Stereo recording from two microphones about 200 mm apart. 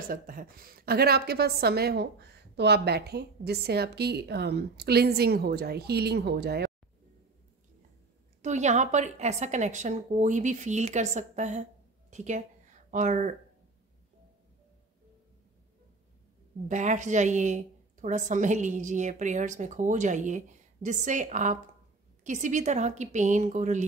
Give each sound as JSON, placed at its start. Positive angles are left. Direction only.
{"t": 0.1, "sound": "a woman's voice", "side_deg": -45}
{"t": 8.4, "sound": "a woman's voice", "side_deg": -35}
{"t": 16.6, "sound": "a woman's voice", "side_deg": -35}